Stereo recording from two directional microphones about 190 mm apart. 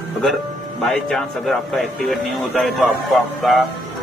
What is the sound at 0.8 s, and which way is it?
A man's voice, centre (ahead or behind).